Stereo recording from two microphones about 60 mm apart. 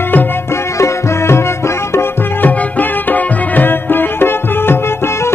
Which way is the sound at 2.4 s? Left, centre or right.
Left.